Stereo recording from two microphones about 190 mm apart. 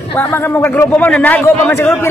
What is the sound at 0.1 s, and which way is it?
A man's voice, 10° left (ahead or behind).